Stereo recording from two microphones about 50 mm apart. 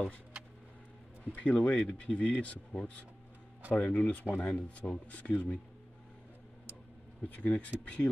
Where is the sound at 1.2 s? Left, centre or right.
Left.